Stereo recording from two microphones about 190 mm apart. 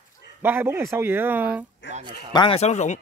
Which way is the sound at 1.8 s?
70° left (ahead or behind).